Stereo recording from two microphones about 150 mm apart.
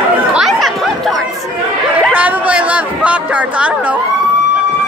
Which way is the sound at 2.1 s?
10° right (ahead or behind).